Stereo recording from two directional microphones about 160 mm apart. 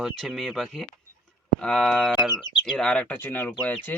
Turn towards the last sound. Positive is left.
turn(degrees=15)  # may be behind; listen again after turning